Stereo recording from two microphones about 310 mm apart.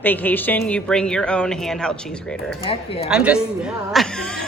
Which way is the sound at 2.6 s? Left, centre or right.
Centre.